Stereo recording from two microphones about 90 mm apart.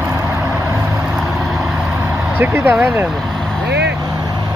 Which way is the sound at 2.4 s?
20° right (ahead or behind).